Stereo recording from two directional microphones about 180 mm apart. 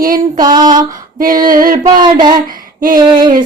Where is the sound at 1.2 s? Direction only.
50° right (ahead or behind).